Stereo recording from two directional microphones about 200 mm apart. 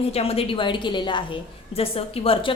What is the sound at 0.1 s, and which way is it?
A woman's voice, 30° left (ahead or behind).